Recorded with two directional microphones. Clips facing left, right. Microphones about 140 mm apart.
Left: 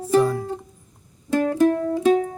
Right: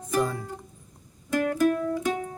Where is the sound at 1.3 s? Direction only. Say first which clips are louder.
Left 5 dB; 30° left (ahead or behind).